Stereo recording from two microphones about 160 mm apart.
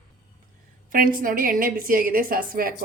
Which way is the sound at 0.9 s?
60° right (ahead or behind).